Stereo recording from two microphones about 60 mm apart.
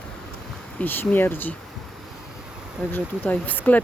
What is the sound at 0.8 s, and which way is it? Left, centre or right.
Speech, left.